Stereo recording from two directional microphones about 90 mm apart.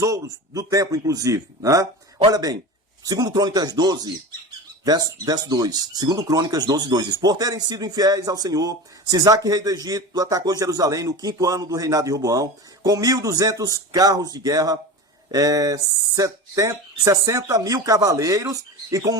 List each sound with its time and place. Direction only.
0.0 s speech: 40° right (ahead or behind)